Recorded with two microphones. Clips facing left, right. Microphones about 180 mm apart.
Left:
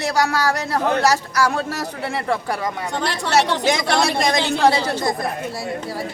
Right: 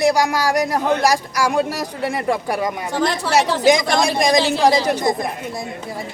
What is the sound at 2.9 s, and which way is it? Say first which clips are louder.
Speech: right 2 dB; centre (ahead or behind).